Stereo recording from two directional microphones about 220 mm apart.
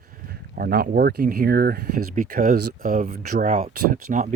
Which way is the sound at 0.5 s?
40° right (ahead or behind).